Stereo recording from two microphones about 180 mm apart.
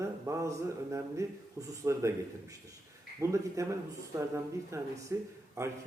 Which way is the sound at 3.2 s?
15° right (ahead or behind).